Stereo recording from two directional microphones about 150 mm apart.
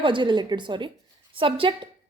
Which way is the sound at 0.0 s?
35° right (ahead or behind).